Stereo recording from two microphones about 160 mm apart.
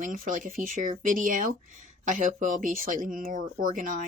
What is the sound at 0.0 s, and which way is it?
Speech, 55° right (ahead or behind).